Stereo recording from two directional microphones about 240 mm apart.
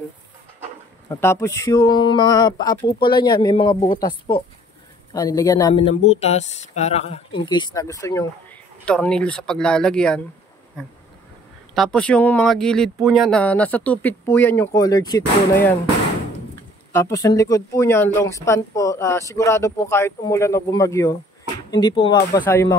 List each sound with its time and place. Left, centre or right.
1.0 s speech: centre
11.7 s speech: centre
16.9 s speech: centre